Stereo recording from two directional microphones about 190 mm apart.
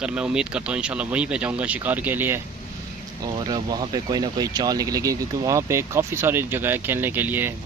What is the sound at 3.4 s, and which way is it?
Speech, 20° right (ahead or behind).